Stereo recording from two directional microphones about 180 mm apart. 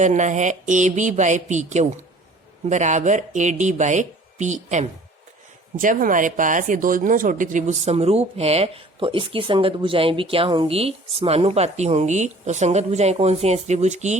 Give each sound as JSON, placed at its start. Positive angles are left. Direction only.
{"t": 0.0, "sound": "speech", "side_deg": -40}